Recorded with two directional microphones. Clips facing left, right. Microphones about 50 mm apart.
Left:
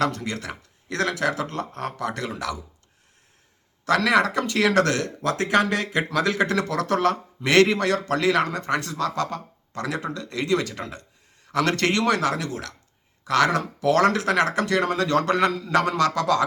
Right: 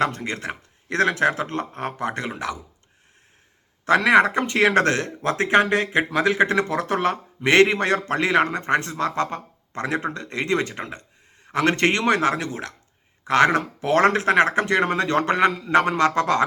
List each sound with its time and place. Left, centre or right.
0.0 s speech: right
3.8 s speech: right